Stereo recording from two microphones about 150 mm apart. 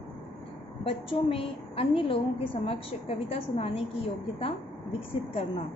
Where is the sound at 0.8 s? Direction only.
40° left (ahead or behind).